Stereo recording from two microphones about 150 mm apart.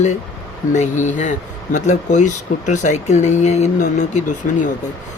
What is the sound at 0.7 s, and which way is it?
Speech, 55° left (ahead or behind).